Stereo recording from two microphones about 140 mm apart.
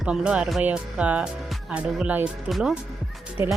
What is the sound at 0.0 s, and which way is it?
Speech, 5° right (ahead or behind).